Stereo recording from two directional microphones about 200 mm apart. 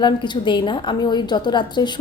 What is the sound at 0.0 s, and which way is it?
A woman's voice, 25° left (ahead or behind).